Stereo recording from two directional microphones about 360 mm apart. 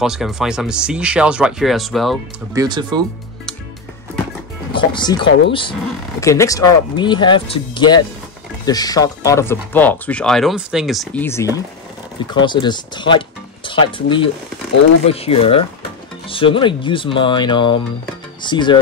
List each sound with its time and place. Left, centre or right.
0.0 s speech: centre
2.6 s speech: centre
4.7 s speech: centre